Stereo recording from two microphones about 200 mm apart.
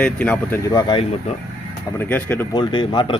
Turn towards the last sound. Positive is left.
turn(degrees=25)  # may be behind; listen again after turning